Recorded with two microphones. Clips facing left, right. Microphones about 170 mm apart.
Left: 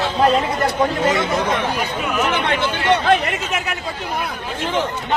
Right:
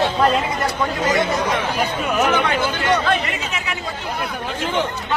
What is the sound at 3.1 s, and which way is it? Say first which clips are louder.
Speech: left 4 dB; 50° left (ahead or behind).